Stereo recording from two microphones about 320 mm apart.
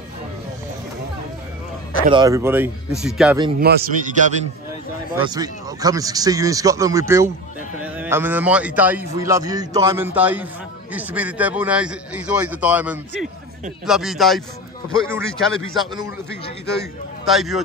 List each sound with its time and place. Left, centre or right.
2.0 s speech: centre
3.5 s a man's voice: right
5.2 s a man's voice: centre
17.2 s a man's voice: centre